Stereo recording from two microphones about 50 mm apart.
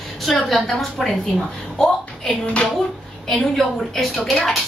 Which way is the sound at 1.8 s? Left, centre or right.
Left.